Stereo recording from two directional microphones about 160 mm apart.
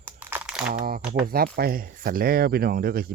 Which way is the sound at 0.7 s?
65° right (ahead or behind).